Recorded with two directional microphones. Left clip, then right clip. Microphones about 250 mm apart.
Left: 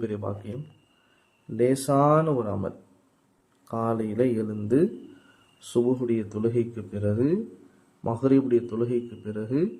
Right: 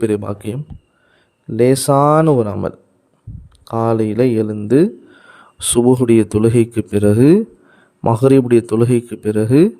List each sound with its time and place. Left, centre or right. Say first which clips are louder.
0.0 s speech: right 13 dB; right
1.5 s speech: right 10 dB; right